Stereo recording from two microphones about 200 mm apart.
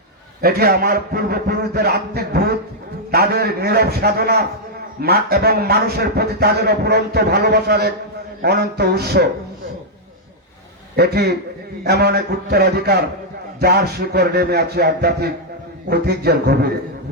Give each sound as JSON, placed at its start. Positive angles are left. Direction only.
{"t": 0.4, "sound": "a man's voice", "side_deg": -50}
{"t": 10.9, "sound": "a man's voice", "side_deg": -55}